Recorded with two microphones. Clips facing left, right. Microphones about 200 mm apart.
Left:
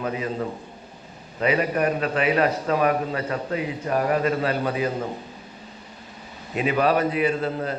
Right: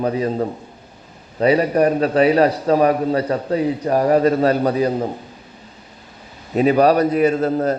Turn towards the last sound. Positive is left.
turn(degrees=-40)  # may be behind; listen again after turning